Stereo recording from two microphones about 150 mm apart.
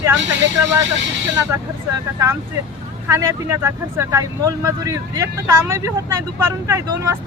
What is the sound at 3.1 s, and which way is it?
Speech, 20° right (ahead or behind).